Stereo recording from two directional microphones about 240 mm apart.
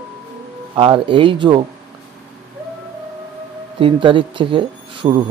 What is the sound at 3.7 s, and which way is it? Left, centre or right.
Speech, right.